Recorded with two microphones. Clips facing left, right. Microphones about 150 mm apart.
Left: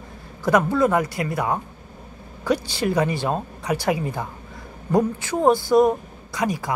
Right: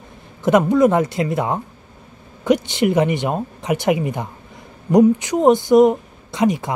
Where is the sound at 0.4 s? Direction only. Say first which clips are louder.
Right 5 dB; 20° right (ahead or behind).